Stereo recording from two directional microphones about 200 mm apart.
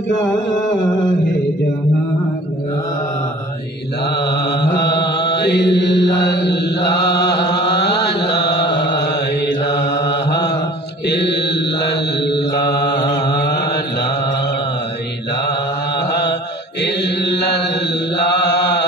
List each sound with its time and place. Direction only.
4.3 s mantra: 55° left (ahead or behind)
6.3 s chant: 55° left (ahead or behind)
7.7 s mantra: 55° left (ahead or behind)
11.1 s mantra: 55° left (ahead or behind)
12.9 s mantra: 20° left (ahead or behind)
16.8 s chant: 60° left (ahead or behind)
18.1 s mantra: 55° left (ahead or behind)